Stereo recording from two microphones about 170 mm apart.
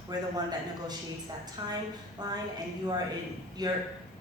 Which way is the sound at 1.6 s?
25° right (ahead or behind).